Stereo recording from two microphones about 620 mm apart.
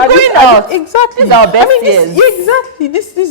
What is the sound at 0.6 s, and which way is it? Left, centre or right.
Speech, left.